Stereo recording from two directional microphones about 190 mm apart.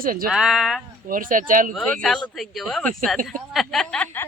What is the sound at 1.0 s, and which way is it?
Speech, 45° right (ahead or behind).